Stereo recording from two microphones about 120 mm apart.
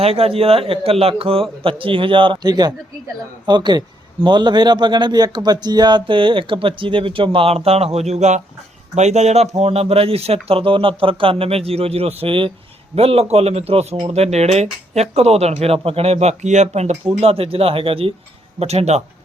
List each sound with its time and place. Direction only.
0.0 s a man's voice: 55° right (ahead or behind); by 17.0 s 70° right (ahead or behind)
17.2 s a man's voice: 55° right (ahead or behind)